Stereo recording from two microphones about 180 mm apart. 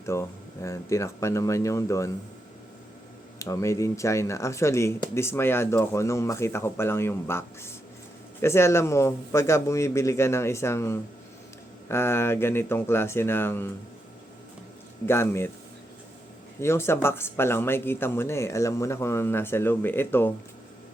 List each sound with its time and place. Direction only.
0.0 s speech: 15° left (ahead or behind)
3.3 s speech: 15° left (ahead or behind)
15.0 s speech: 15° left (ahead or behind)
16.6 s speech: 15° left (ahead or behind)